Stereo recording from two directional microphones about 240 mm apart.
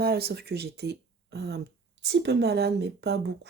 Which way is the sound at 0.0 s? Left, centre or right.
Right.